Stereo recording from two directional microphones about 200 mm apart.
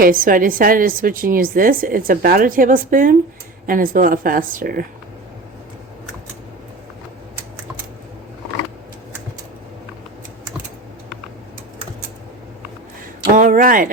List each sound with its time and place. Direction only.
0.0 s a woman's voice: 45° right (ahead or behind)
13.3 s speech: 40° right (ahead or behind)